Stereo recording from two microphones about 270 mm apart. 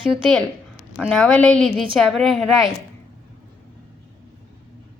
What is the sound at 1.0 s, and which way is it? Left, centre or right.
A woman's voice, centre.